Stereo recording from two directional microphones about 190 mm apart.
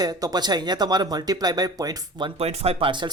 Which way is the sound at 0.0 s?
20° right (ahead or behind).